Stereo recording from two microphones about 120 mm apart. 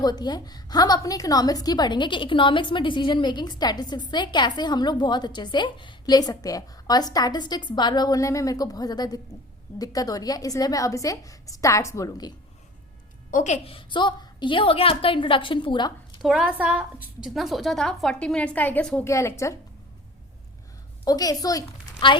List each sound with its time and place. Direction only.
0.0 s a woman's voice: 35° left (ahead or behind)
13.3 s a woman's voice: 80° left
13.7 s a woman's voice: 45° left (ahead or behind)
16.2 s a woman's voice: centre (ahead or behind)
19.0 s a woman's voice: 25° left (ahead or behind)
21.0 s a woman's voice: 30° left (ahead or behind)
22.0 s a woman's voice: 45° left (ahead or behind)